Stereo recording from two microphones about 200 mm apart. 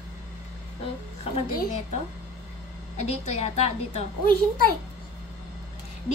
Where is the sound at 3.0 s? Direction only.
30° left (ahead or behind).